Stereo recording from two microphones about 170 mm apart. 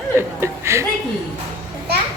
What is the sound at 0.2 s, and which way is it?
Speech, 15° right (ahead or behind).